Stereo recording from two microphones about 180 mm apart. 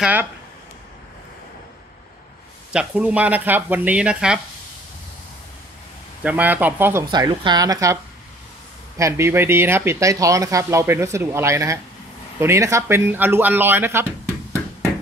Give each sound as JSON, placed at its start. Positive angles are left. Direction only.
{"t": 0.0, "sound": "speech", "side_deg": -10}
{"t": 2.7, "sound": "speech", "side_deg": -5}
{"t": 6.2, "sound": "speech", "side_deg": -10}
{"t": 7.1, "sound": "a woman's voice", "side_deg": -25}